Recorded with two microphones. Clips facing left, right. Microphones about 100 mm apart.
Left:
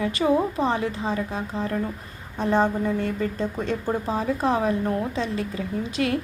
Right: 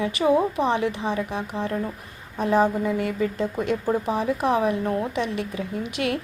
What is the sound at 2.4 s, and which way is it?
A woman's voice, 10° right (ahead or behind).